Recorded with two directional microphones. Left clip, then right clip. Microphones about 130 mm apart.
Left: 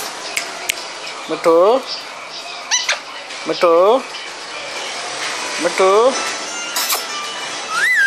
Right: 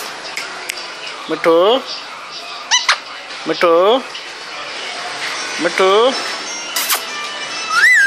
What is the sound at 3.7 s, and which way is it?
Speech, 65° right (ahead or behind).